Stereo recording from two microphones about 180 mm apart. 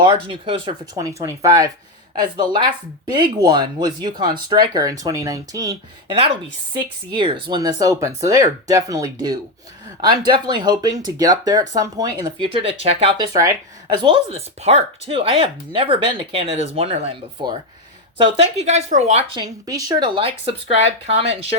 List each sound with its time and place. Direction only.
0.0 s speech: 25° right (ahead or behind)
13.8 s speech: 30° right (ahead or behind)